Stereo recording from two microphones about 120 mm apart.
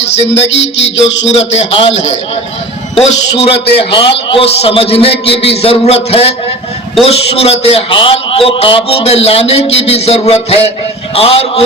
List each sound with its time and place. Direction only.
0.2 s a man's voice: 60° left (ahead or behind)
3.8 s a man's voice: 45° left (ahead or behind)